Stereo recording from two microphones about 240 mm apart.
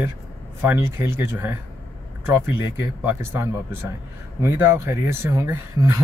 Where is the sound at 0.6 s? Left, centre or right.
Centre.